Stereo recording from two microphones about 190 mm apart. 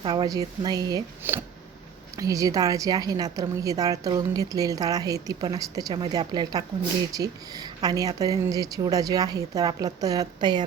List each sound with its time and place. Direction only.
0.1 s a woman's voice: 20° right (ahead or behind)